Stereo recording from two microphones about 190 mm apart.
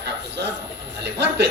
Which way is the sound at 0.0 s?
65° right (ahead or behind).